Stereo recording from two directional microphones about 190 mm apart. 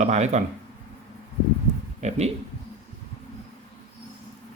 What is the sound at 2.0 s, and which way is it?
Speech, 35° right (ahead or behind).